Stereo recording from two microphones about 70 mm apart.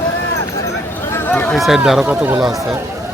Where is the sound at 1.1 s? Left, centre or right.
Left.